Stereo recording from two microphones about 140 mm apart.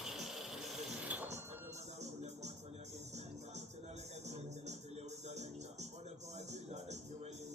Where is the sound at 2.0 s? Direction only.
50° right (ahead or behind).